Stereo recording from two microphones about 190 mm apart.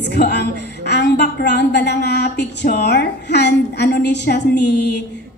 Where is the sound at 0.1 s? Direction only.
60° left (ahead or behind).